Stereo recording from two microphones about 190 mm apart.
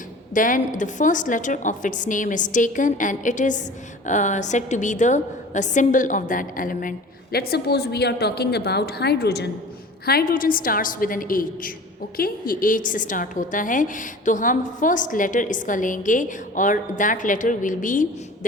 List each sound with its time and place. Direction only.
0.3 s a woman's voice: 45° left (ahead or behind)
7.3 s a woman's voice: 55° left (ahead or behind)